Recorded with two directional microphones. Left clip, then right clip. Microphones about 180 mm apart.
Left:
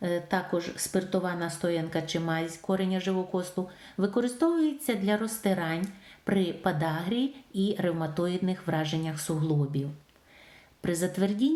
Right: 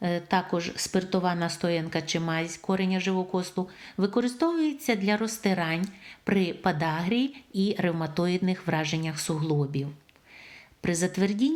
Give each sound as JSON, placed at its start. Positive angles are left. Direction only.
{"t": 0.0, "sound": "a woman's voice", "side_deg": -30}
{"t": 10.8, "sound": "a woman's voice", "side_deg": -25}